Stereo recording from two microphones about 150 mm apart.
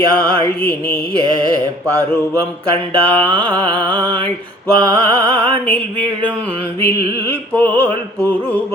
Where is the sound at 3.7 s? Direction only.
10° left (ahead or behind).